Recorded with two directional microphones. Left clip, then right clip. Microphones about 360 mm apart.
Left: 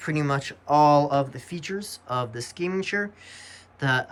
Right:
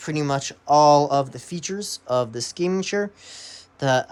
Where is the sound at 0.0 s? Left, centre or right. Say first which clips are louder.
Right 2 dB; centre.